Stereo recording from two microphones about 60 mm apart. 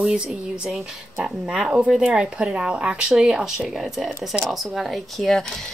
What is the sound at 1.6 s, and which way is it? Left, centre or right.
Speech, right.